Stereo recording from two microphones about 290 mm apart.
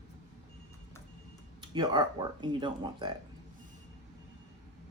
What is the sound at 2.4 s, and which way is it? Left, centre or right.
Speech, centre.